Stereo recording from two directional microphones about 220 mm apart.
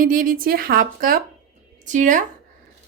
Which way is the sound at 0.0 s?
40° right (ahead or behind).